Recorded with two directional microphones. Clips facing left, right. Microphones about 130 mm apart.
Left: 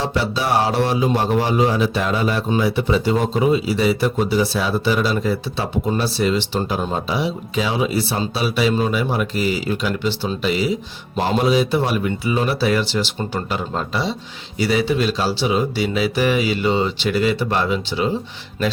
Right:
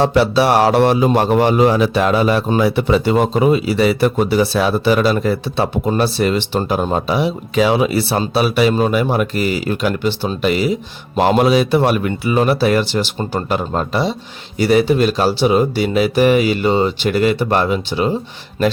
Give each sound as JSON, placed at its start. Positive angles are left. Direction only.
{"t": 0.0, "sound": "speech", "side_deg": -65}